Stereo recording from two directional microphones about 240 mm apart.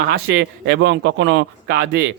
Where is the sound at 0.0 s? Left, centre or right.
Right.